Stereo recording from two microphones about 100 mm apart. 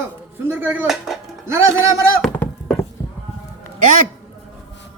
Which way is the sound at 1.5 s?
30° right (ahead or behind).